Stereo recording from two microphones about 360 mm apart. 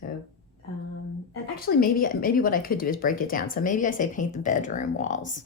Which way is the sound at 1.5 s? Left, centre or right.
Left.